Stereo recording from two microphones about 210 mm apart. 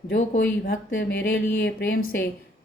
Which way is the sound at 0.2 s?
45° left (ahead or behind).